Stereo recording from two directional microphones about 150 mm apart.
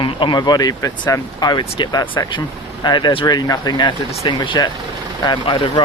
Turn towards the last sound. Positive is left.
turn(degrees=35)  # may be behind; listen again after turning